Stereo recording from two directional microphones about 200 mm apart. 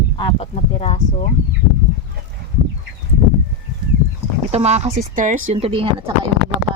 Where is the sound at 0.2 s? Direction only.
25° left (ahead or behind).